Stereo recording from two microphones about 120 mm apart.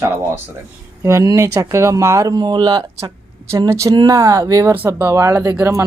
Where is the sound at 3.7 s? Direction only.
25° right (ahead or behind).